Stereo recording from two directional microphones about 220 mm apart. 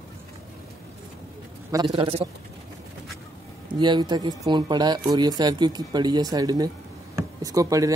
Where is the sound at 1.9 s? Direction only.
25° right (ahead or behind).